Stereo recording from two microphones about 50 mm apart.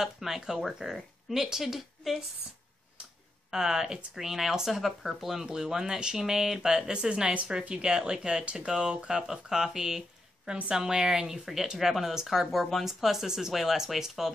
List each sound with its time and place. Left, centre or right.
0.0 s speech: centre
0.8 s speech: centre
3.4 s speech: centre